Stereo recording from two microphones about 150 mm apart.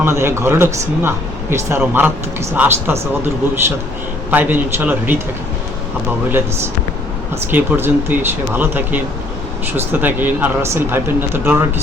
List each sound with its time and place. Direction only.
0.0 s speech: 15° right (ahead or behind)
4.3 s speech: 10° right (ahead or behind)
7.5 s speech: 15° right (ahead or behind)